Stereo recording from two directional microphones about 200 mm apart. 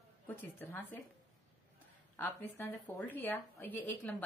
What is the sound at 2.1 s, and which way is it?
A woman's voice, 10° left (ahead or behind).